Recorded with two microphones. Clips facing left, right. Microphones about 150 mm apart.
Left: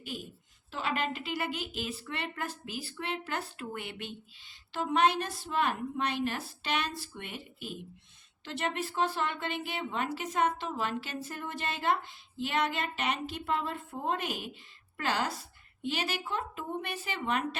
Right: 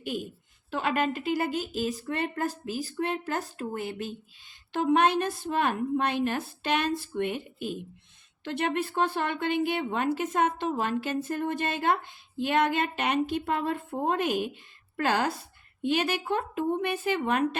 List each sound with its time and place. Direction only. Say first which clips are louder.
0.7 s speech: right 6 dB; 50° right (ahead or behind)
4.7 s a woman's voice: right 4 dB; 50° right (ahead or behind)